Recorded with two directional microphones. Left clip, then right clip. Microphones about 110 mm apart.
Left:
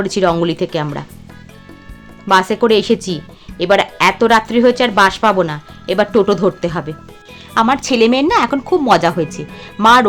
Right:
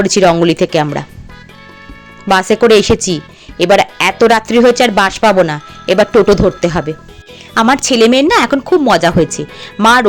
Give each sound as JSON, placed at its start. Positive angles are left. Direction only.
{"t": 0.0, "sound": "speech", "side_deg": -45}
{"t": 2.2, "sound": "speech", "side_deg": -45}
{"t": 7.7, "sound": "a woman's voice", "side_deg": -60}
{"t": 8.0, "sound": "speech", "side_deg": -35}